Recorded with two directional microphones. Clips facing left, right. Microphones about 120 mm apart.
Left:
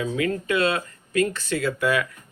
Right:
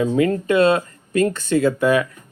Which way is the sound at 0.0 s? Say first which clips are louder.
Right 7 dB; 35° right (ahead or behind).